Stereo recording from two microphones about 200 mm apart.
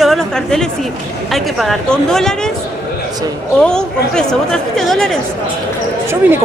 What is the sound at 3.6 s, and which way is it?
A woman's voice, 5° left (ahead or behind).